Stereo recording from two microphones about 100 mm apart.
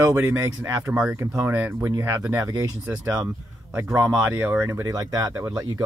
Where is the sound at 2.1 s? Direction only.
35° right (ahead or behind).